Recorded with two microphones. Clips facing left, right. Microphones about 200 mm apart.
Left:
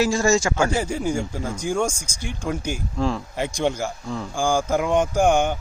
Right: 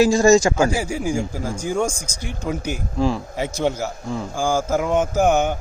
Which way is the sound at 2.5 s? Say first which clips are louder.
Right 2 dB; 10° right (ahead or behind).